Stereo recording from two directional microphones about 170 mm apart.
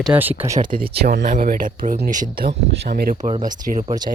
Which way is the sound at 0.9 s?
70° right (ahead or behind).